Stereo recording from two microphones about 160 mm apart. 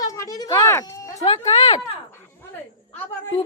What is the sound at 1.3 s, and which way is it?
Speech, 45° left (ahead or behind).